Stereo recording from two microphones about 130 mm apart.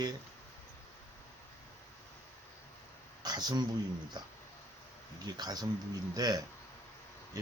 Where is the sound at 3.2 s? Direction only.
35° right (ahead or behind).